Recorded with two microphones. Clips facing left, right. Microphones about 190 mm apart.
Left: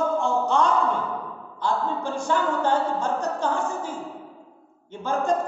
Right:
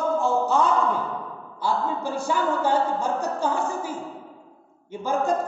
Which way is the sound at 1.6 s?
10° right (ahead or behind).